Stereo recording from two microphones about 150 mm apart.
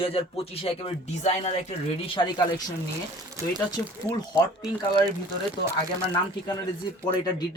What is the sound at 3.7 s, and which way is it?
Speech, 25° left (ahead or behind).